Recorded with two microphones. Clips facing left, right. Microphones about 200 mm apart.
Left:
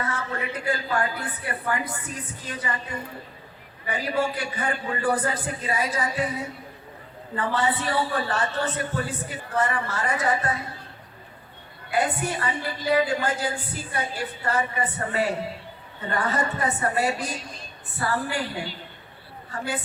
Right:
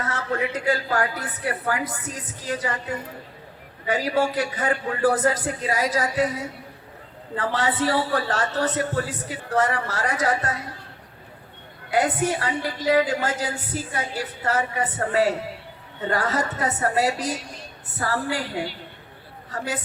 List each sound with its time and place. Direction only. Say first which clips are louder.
0.0 s a woman's voice: right 4 dB; 90° right
11.9 s a woman's voice: right 3 dB; 90° right
19.5 s a woman's voice: right 1 dB; 90° right